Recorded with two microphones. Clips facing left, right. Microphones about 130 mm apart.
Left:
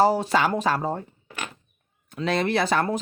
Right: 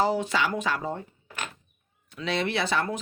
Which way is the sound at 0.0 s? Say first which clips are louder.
Left 5 dB; 35° left (ahead or behind).